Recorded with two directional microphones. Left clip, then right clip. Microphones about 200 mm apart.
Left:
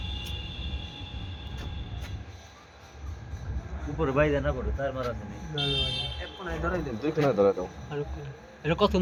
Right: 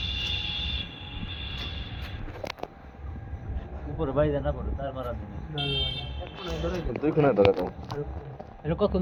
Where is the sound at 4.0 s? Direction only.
35° left (ahead or behind).